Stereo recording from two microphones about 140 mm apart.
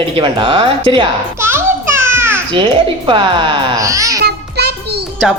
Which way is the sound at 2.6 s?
35° right (ahead or behind).